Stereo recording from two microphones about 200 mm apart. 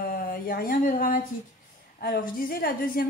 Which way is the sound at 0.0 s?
45° left (ahead or behind).